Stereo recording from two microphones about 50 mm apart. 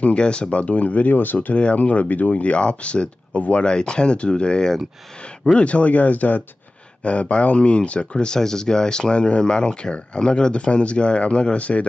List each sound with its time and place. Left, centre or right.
0.0 s speech: left
1.5 s speech: left